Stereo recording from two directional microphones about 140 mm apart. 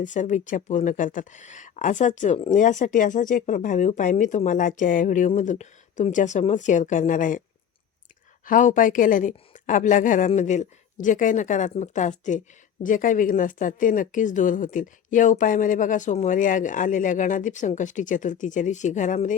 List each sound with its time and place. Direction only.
0.0 s a woman's voice: 60° left (ahead or behind)
8.4 s a woman's voice: 70° left (ahead or behind)
12.8 s a woman's voice: 70° left (ahead or behind)